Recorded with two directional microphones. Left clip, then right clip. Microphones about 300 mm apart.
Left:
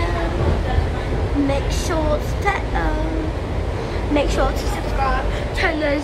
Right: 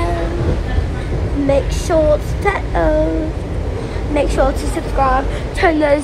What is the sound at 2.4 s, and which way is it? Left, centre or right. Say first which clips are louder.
Speech: right 4 dB; centre.